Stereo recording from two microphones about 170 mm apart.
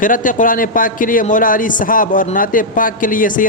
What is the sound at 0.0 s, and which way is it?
Speech, 50° left (ahead or behind).